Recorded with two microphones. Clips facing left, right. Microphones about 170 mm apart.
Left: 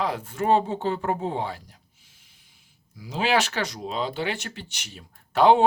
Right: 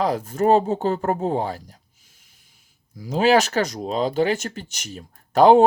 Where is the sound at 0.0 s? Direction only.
40° right (ahead or behind).